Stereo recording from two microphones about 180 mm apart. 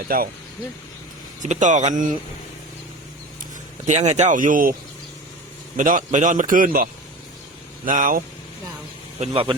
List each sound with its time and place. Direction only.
0.1 s a man's voice: 50° right (ahead or behind)
1.4 s a man's voice: 45° right (ahead or behind)
3.8 s a man's voice: 40° right (ahead or behind)
5.7 s a man's voice: 45° right (ahead or behind)
7.9 s a man's voice: 50° right (ahead or behind)
9.2 s speech: 30° right (ahead or behind)